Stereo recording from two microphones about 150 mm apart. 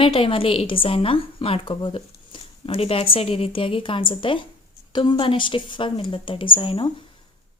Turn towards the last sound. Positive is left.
turn(degrees=35)  # may be behind; listen again after turning